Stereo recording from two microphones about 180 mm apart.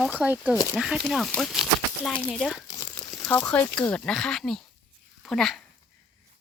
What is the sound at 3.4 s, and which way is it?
Speech, 5° left (ahead or behind).